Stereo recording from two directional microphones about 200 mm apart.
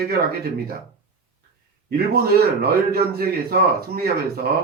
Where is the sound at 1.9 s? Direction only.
50° right (ahead or behind).